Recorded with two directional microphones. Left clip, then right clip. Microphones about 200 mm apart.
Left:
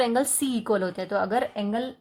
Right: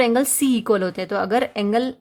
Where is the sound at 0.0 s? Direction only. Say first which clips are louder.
Right 6 dB; 35° right (ahead or behind).